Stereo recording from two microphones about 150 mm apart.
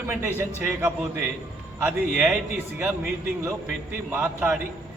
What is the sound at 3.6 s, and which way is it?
Speech, 10° right (ahead or behind).